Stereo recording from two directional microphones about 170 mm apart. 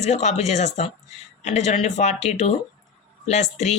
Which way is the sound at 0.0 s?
40° left (ahead or behind).